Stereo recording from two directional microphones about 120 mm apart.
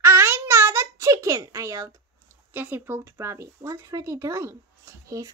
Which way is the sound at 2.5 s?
15° right (ahead or behind).